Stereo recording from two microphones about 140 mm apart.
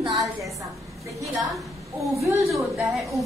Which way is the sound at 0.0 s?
25° right (ahead or behind).